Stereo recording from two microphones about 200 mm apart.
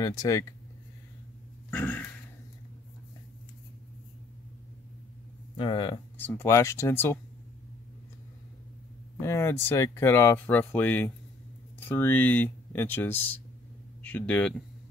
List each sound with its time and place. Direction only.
0.0 s speech: 20° left (ahead or behind)
1.7 s speech: 10° left (ahead or behind)
5.6 s speech: 25° left (ahead or behind)
6.1 s speech: 10° left (ahead or behind)
9.2 s speech: 15° left (ahead or behind)